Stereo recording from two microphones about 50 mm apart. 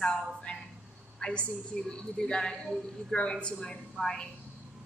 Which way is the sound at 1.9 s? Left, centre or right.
Centre.